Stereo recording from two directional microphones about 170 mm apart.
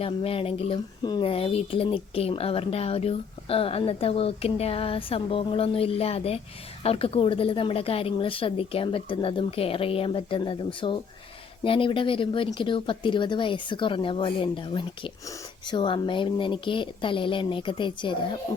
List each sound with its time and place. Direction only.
0.0 s speech: 35° left (ahead or behind)